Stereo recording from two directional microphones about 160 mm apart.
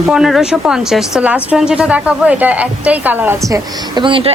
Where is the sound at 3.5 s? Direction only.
25° right (ahead or behind).